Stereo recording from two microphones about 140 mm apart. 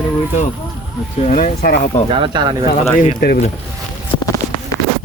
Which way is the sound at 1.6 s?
90° left.